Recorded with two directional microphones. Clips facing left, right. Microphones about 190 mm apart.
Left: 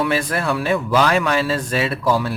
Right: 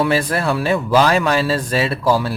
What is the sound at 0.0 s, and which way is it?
Speech, 35° right (ahead or behind).